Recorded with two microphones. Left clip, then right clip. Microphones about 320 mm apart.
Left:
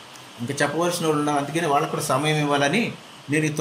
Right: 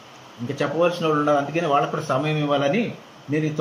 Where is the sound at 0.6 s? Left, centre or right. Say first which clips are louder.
Right 2 dB; left.